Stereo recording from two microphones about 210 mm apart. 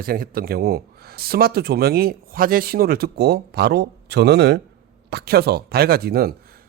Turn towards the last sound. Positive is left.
turn(degrees=-45)  # may be behind; listen again after turning